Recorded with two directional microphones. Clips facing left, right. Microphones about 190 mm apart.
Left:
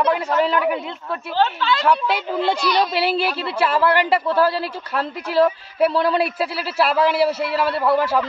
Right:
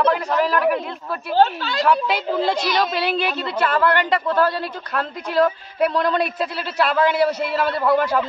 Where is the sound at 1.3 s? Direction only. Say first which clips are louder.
Right 2 dB; 40° right (ahead or behind).